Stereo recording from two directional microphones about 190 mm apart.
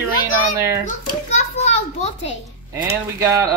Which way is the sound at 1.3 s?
35° left (ahead or behind).